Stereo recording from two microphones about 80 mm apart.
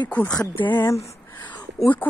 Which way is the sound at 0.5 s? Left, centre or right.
Left.